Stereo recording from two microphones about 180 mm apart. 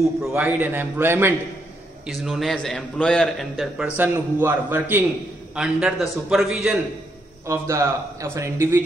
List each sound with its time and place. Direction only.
0.3 s a man's voice: 10° right (ahead or behind)
2.0 s a man's voice: centre (ahead or behind)
7.4 s a man's voice: 15° right (ahead or behind)